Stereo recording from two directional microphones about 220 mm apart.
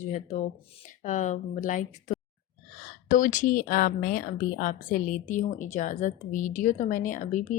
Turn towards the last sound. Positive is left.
turn(degrees=35)  # may be behind; listen again after turning